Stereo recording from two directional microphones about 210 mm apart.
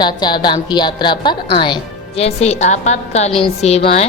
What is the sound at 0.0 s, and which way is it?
A woman's voice, 20° left (ahead or behind).